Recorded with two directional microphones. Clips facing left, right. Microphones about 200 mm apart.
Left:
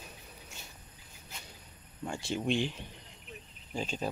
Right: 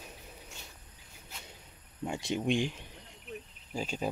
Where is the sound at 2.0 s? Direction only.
20° right (ahead or behind).